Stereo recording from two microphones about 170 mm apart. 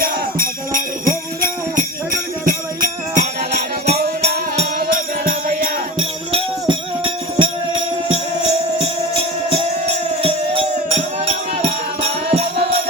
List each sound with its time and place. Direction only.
0.0 s jingle bell: 55° right (ahead or behind)
2.5 s music: 45° right (ahead or behind)
6.0 s music: 35° right (ahead or behind)